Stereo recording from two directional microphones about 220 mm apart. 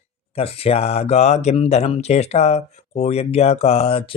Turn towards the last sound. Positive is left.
turn(degrees=25)  # may be behind; listen again after turning